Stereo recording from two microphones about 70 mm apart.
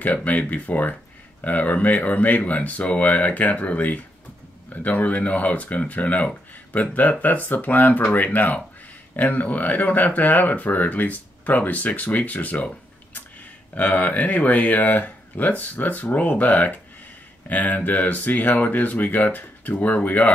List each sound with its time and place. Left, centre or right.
0.0 s speech: left
13.7 s speech: left